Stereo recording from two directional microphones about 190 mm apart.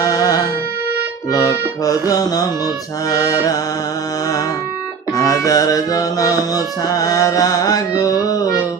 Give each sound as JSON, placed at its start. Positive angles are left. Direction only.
{"t": 0.0, "sound": "music", "side_deg": 20}
{"t": 5.1, "sound": "music", "side_deg": 20}